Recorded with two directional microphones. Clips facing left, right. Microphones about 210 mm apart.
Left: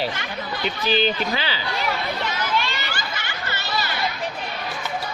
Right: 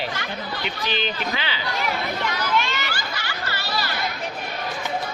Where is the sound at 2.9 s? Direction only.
20° left (ahead or behind).